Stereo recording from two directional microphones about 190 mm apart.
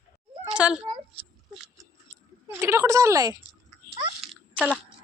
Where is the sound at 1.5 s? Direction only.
Centre (ahead or behind).